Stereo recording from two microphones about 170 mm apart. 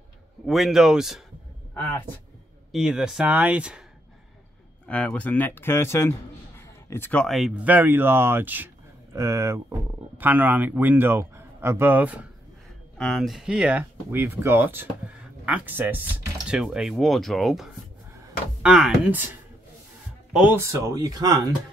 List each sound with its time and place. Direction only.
0.5 s speech: centre (ahead or behind)
1.7 s speech: 10° left (ahead or behind)
2.7 s speech: 5° right (ahead or behind)
4.8 s speech: 10° left (ahead or behind); by 12.3 s 10° right (ahead or behind)
12.9 s speech: centre (ahead or behind)
20.3 s speech: 10° right (ahead or behind)